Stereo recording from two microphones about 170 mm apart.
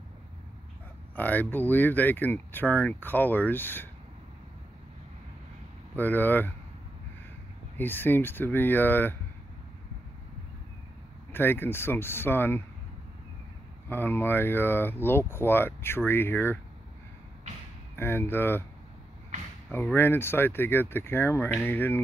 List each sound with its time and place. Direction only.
1.1 s speech: 10° left (ahead or behind)
5.9 s speech: 10° left (ahead or behind)
7.7 s speech: 10° left (ahead or behind)
11.3 s speech: 10° left (ahead or behind)
13.8 s speech: 10° left (ahead or behind)
17.9 s speech: 15° left (ahead or behind)
19.7 s speech: 10° left (ahead or behind)